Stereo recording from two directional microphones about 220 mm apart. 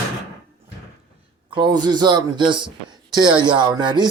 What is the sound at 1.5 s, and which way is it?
Speech, 20° right (ahead or behind).